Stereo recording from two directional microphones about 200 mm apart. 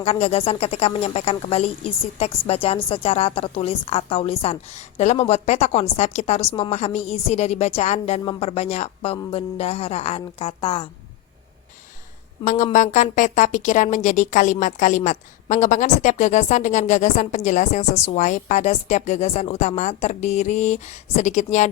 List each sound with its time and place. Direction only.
0.0 s speech: 30° left (ahead or behind)
12.5 s speech: 35° left (ahead or behind)